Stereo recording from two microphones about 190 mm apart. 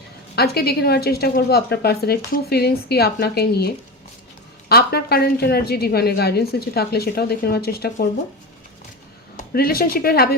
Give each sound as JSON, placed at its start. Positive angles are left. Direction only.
{"t": 0.3, "sound": "a woman's voice", "side_deg": 55}
{"t": 4.7, "sound": "a woman's voice", "side_deg": 55}
{"t": 9.4, "sound": "speech", "side_deg": 50}